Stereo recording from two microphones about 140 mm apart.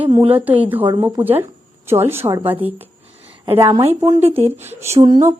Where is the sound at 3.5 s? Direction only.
35° right (ahead or behind).